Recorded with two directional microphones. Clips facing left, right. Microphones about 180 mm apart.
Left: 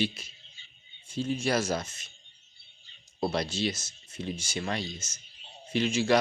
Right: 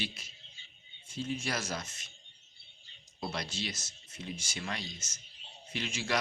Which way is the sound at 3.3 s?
30° left (ahead or behind).